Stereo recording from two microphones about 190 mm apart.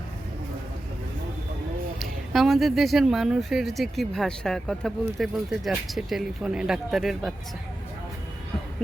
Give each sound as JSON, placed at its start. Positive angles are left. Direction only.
{"t": 2.0, "sound": "speech", "side_deg": 0}